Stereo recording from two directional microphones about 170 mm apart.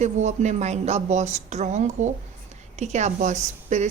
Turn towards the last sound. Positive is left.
turn(degrees=-45)  # may be behind; listen again after turning